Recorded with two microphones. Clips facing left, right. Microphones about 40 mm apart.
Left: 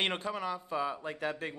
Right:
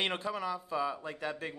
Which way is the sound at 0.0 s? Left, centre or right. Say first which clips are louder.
Left 1 dB; centre.